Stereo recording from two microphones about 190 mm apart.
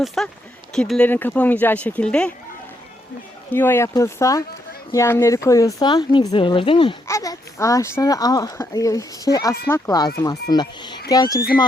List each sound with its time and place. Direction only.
0.0 s speech: centre (ahead or behind)
3.5 s speech: 10° left (ahead or behind)